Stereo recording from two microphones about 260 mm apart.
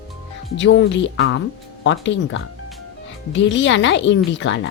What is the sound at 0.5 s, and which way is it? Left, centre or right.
Speech, left.